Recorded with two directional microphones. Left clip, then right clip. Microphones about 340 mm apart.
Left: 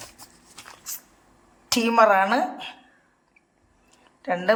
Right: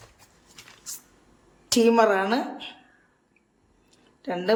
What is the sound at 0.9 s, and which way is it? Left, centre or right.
Spray, centre.